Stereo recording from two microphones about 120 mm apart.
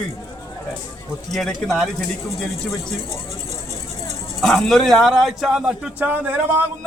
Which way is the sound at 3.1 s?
25° left (ahead or behind).